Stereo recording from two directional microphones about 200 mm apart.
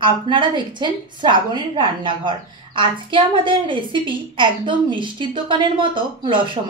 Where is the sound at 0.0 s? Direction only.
25° right (ahead or behind).